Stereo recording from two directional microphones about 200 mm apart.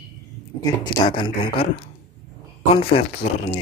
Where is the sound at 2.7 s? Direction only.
30° left (ahead or behind).